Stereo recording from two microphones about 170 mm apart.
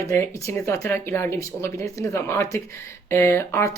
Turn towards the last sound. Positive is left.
turn(degrees=15)  # may be behind; listen again after turning